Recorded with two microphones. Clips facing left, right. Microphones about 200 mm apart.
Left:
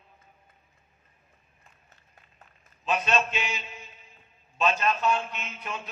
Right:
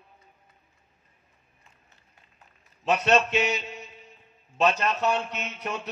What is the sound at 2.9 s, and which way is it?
A man's voice, 70° right (ahead or behind).